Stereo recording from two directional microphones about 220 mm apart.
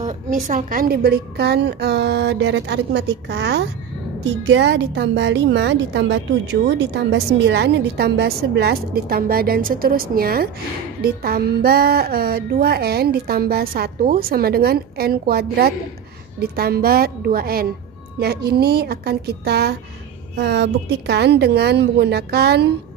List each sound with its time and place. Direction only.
0.0 s a woman's voice: 35° right (ahead or behind)